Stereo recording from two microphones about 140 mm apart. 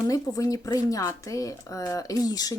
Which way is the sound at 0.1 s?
25° left (ahead or behind).